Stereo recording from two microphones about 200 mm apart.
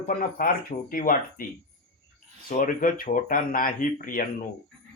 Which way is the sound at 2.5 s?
45° left (ahead or behind).